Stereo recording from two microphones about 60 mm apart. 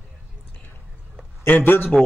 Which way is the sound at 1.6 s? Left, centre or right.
Left.